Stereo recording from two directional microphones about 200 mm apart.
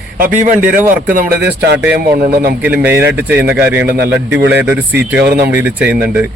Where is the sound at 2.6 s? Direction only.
10° right (ahead or behind).